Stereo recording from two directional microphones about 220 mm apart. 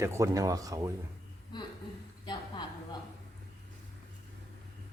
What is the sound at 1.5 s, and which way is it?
Speech, 20° left (ahead or behind).